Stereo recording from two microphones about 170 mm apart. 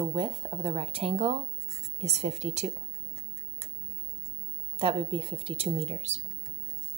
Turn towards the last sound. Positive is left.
turn(degrees=-40)  # may be behind; listen again after turning